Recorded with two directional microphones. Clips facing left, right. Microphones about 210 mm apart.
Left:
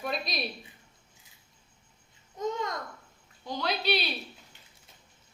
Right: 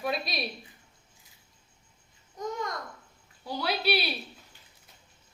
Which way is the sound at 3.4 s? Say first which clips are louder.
Right 1 dB; 10° right (ahead or behind).